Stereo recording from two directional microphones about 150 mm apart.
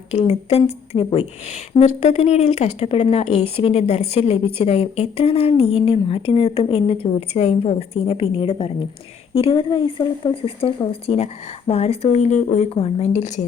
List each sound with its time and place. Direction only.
0.1 s a woman's voice: 45° left (ahead or behind)